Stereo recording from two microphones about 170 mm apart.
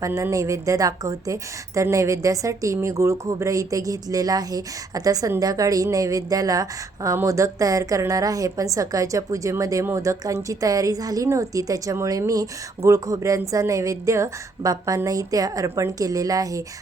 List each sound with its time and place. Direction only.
0.0 s a woman's voice: 20° right (ahead or behind)